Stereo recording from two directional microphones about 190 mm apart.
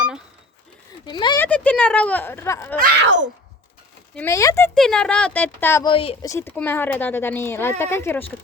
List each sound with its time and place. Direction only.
1.0 s speech: 25° left (ahead or behind)
1.4 s speech: 5° left (ahead or behind)
4.1 s speech: 10° left (ahead or behind)
4.7 s speech: 5° left (ahead or behind)
5.8 s a woman's voice: 30° left (ahead or behind)
6.2 s speech: 15° left (ahead or behind)